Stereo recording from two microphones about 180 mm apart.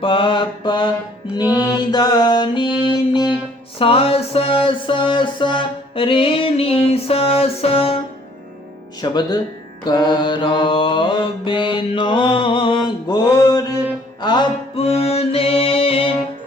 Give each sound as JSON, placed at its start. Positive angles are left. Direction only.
{"t": 0.0, "sound": "mantra", "side_deg": 30}
{"t": 2.9, "sound": "music", "side_deg": 25}
{"t": 9.0, "sound": "mantra", "side_deg": 25}